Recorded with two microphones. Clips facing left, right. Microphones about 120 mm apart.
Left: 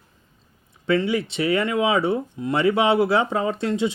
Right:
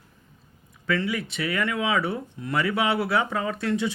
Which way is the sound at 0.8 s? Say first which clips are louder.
Left 6 dB; 25° left (ahead or behind).